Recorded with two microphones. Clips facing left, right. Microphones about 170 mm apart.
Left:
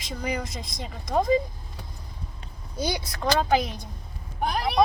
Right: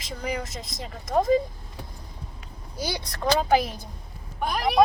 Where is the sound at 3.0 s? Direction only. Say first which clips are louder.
Right 4 dB; centre (ahead or behind).